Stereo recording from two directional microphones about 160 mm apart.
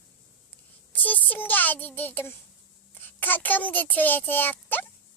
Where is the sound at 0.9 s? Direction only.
10° left (ahead or behind).